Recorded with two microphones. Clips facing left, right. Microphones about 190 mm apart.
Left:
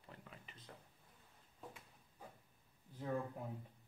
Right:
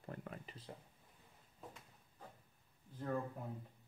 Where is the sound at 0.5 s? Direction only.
30° right (ahead or behind).